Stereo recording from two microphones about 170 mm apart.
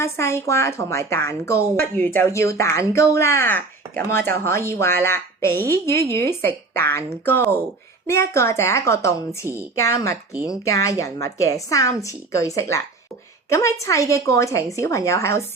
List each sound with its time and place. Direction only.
0.0 s a woman's voice: 15° left (ahead or behind)